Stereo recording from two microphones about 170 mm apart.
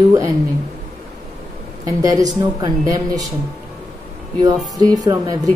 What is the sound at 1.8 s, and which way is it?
A woman's voice, 20° right (ahead or behind).